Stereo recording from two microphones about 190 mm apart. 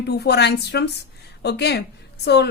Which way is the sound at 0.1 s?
60° left (ahead or behind).